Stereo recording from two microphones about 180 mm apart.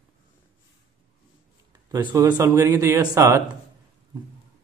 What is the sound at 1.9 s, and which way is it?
A man's voice, 20° right (ahead or behind).